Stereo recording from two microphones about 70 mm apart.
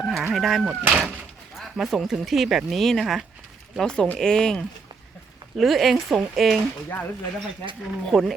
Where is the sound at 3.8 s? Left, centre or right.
Centre.